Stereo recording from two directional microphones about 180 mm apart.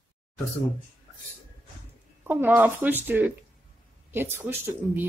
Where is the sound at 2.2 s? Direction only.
10° right (ahead or behind).